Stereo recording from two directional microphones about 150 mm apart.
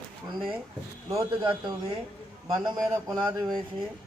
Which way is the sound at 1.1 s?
20° right (ahead or behind).